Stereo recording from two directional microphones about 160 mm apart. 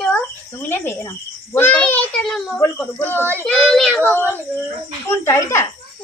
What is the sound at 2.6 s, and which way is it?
A woman's voice, 15° left (ahead or behind).